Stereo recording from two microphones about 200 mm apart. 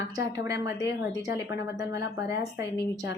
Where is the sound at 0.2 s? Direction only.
15° right (ahead or behind).